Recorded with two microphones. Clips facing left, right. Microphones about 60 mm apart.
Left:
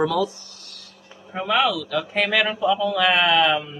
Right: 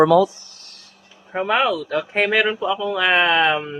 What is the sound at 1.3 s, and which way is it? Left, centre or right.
Speech, right.